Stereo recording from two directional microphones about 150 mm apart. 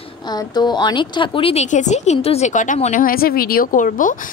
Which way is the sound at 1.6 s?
55° left (ahead or behind).